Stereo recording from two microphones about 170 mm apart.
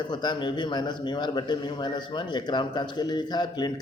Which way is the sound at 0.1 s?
25° left (ahead or behind).